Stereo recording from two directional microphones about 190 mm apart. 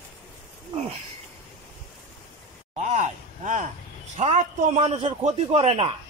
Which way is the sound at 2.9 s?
40° right (ahead or behind).